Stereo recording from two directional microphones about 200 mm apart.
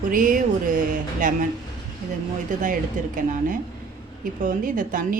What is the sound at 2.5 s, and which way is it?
A woman's voice, 40° right (ahead or behind).